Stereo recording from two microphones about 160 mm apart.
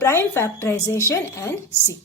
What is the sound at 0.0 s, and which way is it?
Speech, 15° left (ahead or behind).